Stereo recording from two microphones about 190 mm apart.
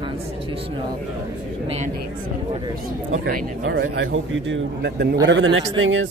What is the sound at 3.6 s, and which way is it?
A man's voice, 70° right (ahead or behind).